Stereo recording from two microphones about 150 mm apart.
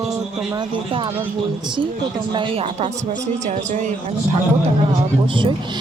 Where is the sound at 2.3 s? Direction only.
35° right (ahead or behind).